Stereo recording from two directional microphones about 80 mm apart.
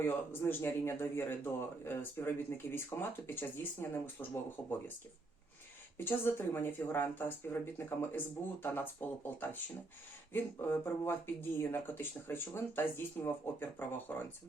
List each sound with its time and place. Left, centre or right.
0.3 s speech: left
6.0 s speech: left